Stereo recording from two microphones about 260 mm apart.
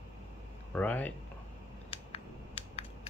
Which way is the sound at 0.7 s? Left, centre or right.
Centre.